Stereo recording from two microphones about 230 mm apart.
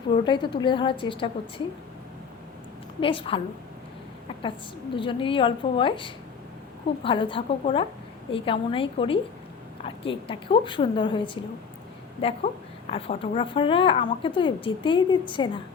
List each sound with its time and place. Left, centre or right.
0.3 s a woman's voice: centre
3.0 s a woman's voice: left
4.9 s a woman's voice: left